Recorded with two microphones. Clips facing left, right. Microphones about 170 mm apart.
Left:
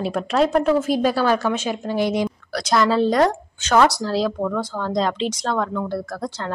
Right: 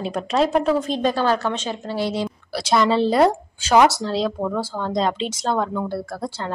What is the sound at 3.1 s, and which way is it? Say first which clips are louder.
A woman's voice: right 1 dB; 10° right (ahead or behind).